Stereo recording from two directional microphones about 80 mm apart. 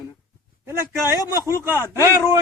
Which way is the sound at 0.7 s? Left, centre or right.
Right.